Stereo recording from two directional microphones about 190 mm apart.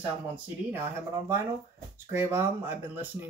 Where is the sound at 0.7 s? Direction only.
10° right (ahead or behind).